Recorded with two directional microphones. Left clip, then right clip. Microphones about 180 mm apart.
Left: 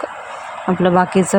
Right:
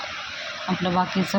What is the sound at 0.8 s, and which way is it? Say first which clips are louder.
Speech: left 10 dB; 40° left (ahead or behind).